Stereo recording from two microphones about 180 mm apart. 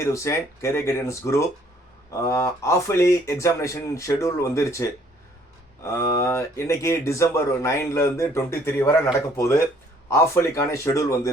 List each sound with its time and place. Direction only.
0.0 s speech: 15° left (ahead or behind)